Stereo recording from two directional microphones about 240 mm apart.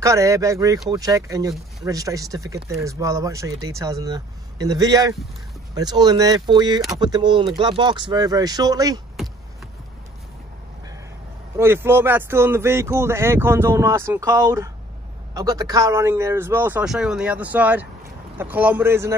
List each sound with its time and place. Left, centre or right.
0.0 s speech: centre
11.5 s speech: centre